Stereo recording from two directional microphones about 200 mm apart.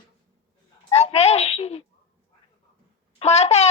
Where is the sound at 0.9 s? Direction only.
30° left (ahead or behind).